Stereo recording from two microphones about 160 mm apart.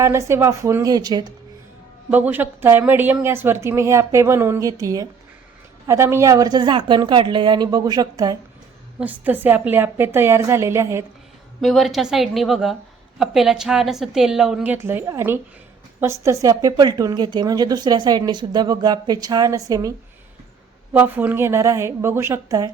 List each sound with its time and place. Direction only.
0.0 s speech: 15° right (ahead or behind)
2.0 s speech: 10° right (ahead or behind)
9.0 s speech: 10° right (ahead or behind)
11.6 s a woman's voice: centre (ahead or behind); by 19.9 s 20° right (ahead or behind)
20.9 s speech: 10° right (ahead or behind)